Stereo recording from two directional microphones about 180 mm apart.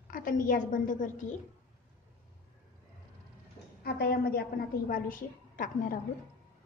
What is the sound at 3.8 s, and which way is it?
A woman's voice, 60° left (ahead or behind).